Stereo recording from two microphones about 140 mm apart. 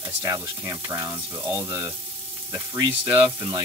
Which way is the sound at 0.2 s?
25° right (ahead or behind).